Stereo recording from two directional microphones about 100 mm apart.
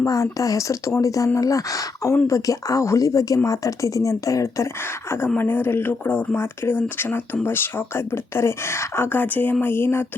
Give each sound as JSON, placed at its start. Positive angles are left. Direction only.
{"t": 0.0, "sound": "speech", "side_deg": 35}
{"t": 5.4, "sound": "speech", "side_deg": 20}